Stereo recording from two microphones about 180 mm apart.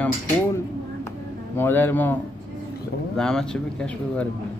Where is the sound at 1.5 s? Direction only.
10° left (ahead or behind).